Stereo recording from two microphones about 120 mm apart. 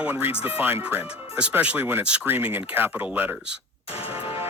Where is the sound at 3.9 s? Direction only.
55° left (ahead or behind).